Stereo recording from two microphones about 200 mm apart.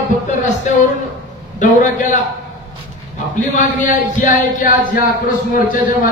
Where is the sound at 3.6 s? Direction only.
40° left (ahead or behind).